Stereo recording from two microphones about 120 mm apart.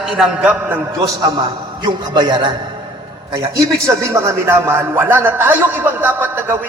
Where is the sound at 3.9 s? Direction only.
25° right (ahead or behind).